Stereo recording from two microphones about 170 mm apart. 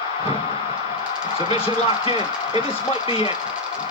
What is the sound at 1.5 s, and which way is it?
Speech, 35° left (ahead or behind).